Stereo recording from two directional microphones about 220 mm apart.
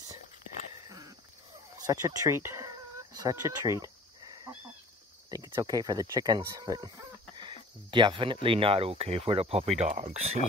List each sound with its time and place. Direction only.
0.8 s a sound: 15° right (ahead or behind)
1.8 s speech: 15° right (ahead or behind)
3.2 s cricket: 15° right (ahead or behind)
5.3 s speech: 15° right (ahead or behind); by 10.1 s 35° right (ahead or behind)